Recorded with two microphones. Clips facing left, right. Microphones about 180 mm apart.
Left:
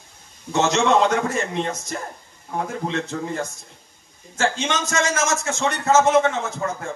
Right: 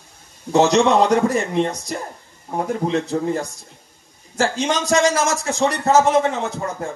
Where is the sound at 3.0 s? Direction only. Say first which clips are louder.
Right 5 dB; 35° right (ahead or behind).